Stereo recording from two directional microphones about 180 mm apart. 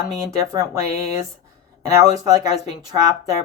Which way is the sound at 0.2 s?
15° right (ahead or behind).